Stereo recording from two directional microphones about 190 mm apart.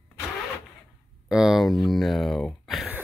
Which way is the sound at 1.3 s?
Centre (ahead or behind).